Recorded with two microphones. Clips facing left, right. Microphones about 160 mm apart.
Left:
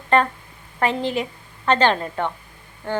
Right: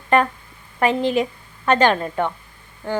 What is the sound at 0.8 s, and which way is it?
A woman's voice, 15° right (ahead or behind).